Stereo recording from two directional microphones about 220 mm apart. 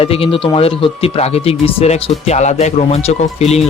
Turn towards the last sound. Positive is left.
turn(degrees=30)  # may be behind; listen again after turning